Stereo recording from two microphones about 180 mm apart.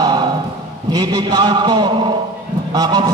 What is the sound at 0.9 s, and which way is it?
A man's voice, 25° right (ahead or behind).